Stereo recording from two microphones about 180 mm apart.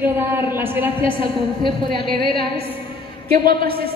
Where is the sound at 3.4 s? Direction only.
55° right (ahead or behind).